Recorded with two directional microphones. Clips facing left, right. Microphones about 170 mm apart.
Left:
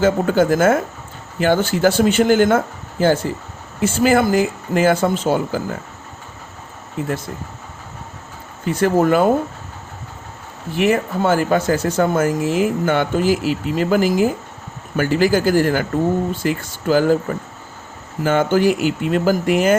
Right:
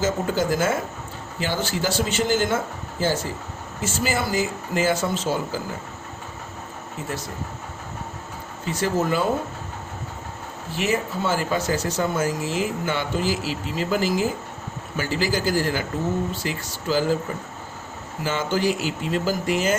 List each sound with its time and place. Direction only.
0.0 s speech: 55° left (ahead or behind)
8.6 s speech: 55° left (ahead or behind)
10.8 s speech: 55° left (ahead or behind)
18.2 s speech: 55° left (ahead or behind)